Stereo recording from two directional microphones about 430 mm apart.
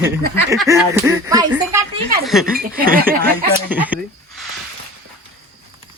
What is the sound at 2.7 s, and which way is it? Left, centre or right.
Speech, centre.